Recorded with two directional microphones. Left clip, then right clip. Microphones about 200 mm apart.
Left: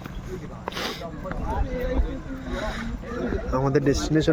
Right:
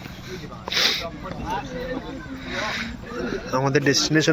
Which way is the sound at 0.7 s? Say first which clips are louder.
Right 10 dB; 10° left (ahead or behind).